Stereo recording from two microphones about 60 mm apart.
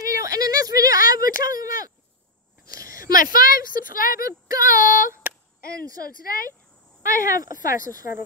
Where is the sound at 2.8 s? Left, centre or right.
Right.